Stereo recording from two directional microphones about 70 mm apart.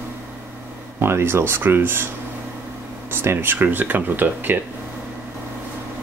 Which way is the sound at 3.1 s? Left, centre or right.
Right.